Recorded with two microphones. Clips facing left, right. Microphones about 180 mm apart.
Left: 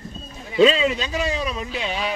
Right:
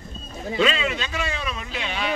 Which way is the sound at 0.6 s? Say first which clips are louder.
Left 7 dB; 35° left (ahead or behind).